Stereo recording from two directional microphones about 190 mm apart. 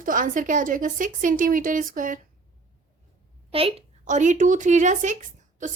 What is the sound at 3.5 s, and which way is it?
A woman's voice, 30° right (ahead or behind).